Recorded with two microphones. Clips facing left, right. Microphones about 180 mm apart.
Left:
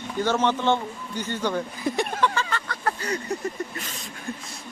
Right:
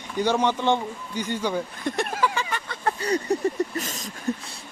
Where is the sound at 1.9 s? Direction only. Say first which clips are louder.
Left 1 dB; centre (ahead or behind); by 2.7 s 15° right (ahead or behind).